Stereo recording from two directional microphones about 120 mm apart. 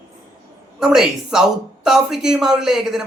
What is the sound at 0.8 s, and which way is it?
Speech, 5° right (ahead or behind).